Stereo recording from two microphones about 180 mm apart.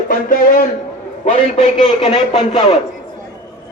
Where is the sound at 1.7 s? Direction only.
30° left (ahead or behind).